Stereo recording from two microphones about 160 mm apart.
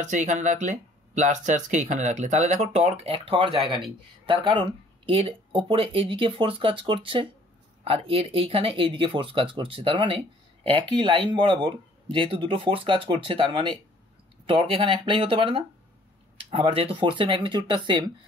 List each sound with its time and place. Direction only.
0.0 s speech: 50° right (ahead or behind); by 18.1 s 30° right (ahead or behind)